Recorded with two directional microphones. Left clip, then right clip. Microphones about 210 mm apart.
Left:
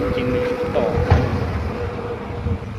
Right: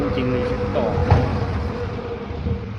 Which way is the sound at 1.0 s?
45° left (ahead or behind).